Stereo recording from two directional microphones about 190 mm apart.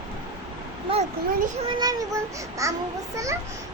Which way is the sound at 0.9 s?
30° right (ahead or behind).